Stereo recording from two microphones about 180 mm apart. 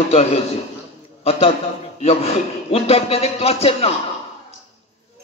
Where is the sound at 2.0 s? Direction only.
35° left (ahead or behind).